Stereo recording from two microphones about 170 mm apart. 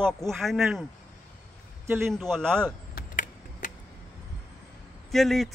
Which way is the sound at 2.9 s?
50° left (ahead or behind).